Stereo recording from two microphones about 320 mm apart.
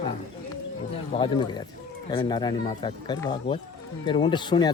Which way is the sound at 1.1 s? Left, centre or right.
Centre.